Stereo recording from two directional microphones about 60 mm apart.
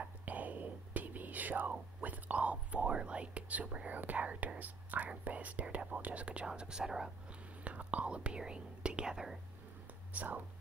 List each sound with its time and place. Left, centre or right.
0.0 s whispering: right
5.2 s speech: right; by 7.1 s centre
7.6 s speech: right
10.1 s speech: right